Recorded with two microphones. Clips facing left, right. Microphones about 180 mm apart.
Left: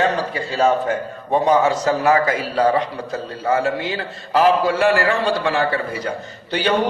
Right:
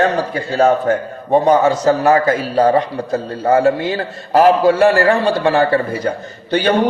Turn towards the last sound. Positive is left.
turn(degrees=-50)  # may be behind; listen again after turning